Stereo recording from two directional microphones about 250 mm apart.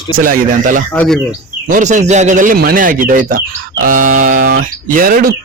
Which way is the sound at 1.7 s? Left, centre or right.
Right.